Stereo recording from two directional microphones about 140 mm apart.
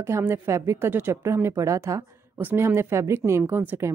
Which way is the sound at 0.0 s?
20° right (ahead or behind).